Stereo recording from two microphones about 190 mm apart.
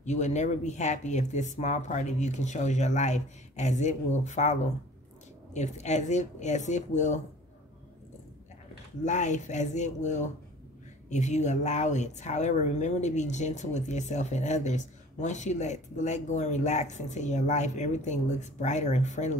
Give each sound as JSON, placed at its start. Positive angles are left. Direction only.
{"t": 0.0, "sound": "speech", "side_deg": 40}
{"t": 9.0, "sound": "speech", "side_deg": 40}